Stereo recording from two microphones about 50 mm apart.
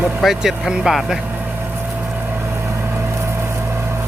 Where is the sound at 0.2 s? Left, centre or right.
Centre.